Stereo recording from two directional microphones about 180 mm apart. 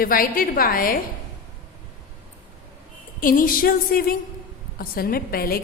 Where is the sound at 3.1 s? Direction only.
50° left (ahead or behind).